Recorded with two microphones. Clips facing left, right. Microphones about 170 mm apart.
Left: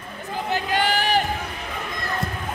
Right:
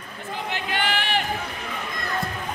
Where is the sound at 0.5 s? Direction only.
40° left (ahead or behind).